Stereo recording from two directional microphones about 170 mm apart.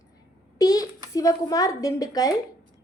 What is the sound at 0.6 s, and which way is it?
A child's voice, 20° left (ahead or behind).